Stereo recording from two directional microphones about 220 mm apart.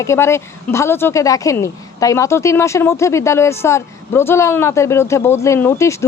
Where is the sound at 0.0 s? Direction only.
10° left (ahead or behind).